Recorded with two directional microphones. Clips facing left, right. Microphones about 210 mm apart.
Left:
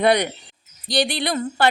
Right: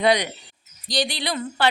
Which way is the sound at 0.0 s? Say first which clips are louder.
Left 2 dB; 55° left (ahead or behind).